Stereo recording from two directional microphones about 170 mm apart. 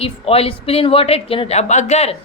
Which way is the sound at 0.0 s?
35° left (ahead or behind).